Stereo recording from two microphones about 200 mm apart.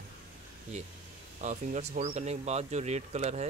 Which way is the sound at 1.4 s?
35° right (ahead or behind).